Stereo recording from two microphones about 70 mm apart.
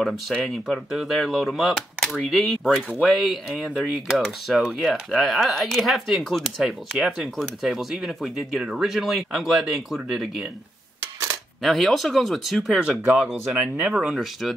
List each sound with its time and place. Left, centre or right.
0.0 s speech: centre
3.7 s speech: centre
11.6 s speech: centre